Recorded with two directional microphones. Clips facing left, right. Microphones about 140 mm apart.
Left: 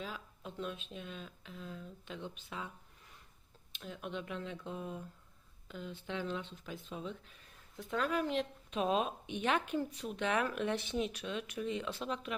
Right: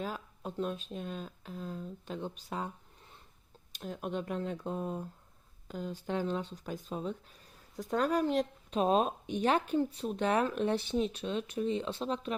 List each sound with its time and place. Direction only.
0.0 s speech: 45° right (ahead or behind)